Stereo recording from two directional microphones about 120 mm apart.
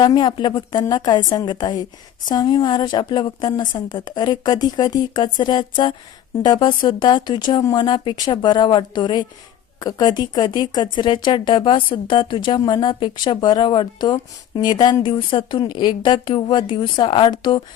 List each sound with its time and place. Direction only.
0.0 s speech: 35° left (ahead or behind)